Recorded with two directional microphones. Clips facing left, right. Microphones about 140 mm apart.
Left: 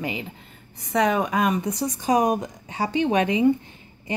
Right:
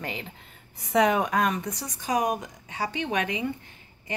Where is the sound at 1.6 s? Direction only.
25° left (ahead or behind).